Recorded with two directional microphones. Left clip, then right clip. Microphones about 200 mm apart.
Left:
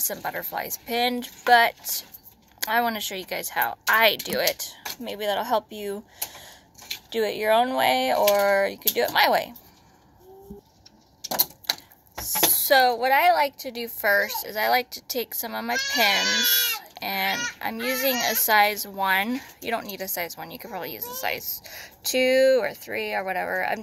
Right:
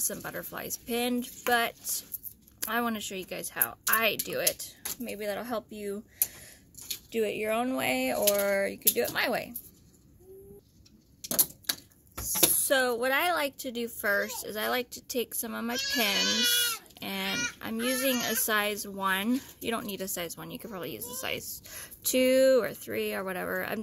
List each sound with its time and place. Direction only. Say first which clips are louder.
0.0 s speech: left 7 dB; 30° right (ahead or behind)
12.2 s speech: left 5 dB; 35° right (ahead or behind)